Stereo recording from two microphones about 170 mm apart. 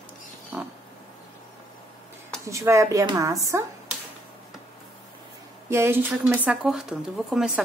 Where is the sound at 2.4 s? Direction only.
20° right (ahead or behind).